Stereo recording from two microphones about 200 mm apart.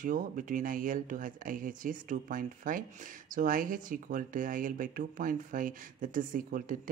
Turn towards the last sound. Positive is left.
turn(degrees=-45)  # may be behind; listen again after turning